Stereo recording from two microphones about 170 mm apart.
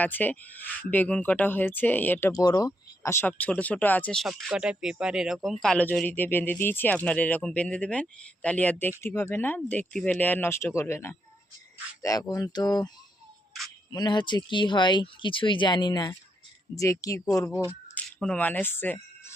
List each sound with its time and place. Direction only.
0.0 s speech: 10° left (ahead or behind)
12.3 s speech: 20° left (ahead or behind)
13.9 s speech: 25° left (ahead or behind)
17.9 s speech: 5° left (ahead or behind)